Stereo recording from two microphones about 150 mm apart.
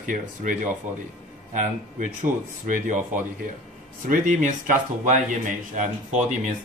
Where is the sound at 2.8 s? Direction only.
60° right (ahead or behind).